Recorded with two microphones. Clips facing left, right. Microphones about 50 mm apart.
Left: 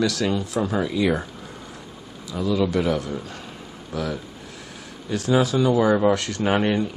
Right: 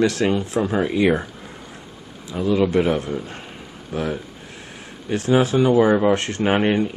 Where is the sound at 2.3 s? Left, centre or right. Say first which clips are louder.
Right 3 dB; right.